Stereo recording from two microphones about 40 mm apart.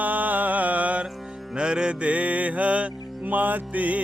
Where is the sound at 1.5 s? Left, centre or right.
Right.